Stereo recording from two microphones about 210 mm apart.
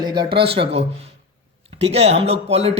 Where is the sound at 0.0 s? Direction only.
20° right (ahead or behind).